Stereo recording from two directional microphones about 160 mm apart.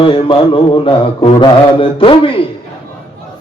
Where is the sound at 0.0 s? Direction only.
35° left (ahead or behind).